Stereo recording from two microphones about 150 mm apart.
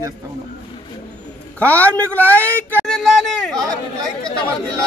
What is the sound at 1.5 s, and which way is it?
Speech, 10° left (ahead or behind).